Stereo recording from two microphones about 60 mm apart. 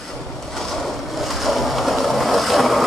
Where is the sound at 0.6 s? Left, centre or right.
Centre.